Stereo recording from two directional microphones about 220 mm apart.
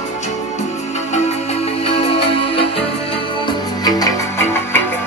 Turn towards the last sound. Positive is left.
turn(degrees=15)  # may be behind; listen again after turning